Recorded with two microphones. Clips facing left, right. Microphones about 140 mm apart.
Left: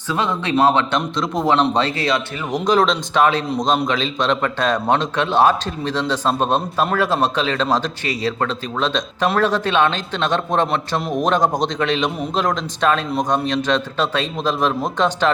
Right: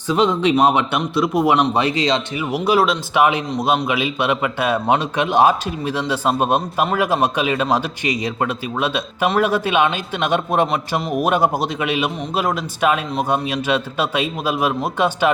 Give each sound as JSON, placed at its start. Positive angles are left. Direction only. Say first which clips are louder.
{"t": 0.1, "sound": "a man's voice", "louder": "right 4 dB", "side_deg": -15}
{"t": 2.5, "sound": "a man's voice", "louder": "even", "side_deg": -10}